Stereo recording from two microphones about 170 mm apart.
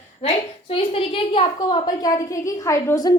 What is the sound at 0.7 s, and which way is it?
A woman's voice, 35° left (ahead or behind).